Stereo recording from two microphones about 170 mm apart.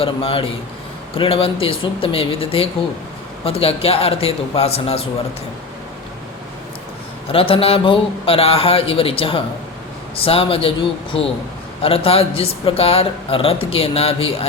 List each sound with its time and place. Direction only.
0.0 s a man's voice: 30° left (ahead or behind)
7.3 s a man's voice: 35° left (ahead or behind)
11.8 s a man's voice: 35° left (ahead or behind)